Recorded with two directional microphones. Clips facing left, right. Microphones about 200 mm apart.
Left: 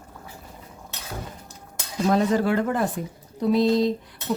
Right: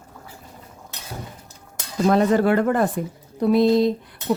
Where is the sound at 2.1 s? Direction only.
60° right (ahead or behind).